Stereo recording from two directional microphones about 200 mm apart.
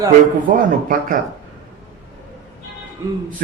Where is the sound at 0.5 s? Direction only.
45° right (ahead or behind).